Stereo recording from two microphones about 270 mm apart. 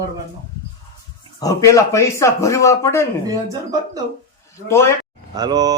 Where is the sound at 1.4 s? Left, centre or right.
Centre.